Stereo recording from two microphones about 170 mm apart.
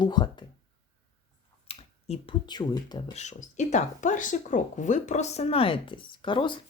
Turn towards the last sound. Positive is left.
turn(degrees=30)  # may be behind; listen again after turning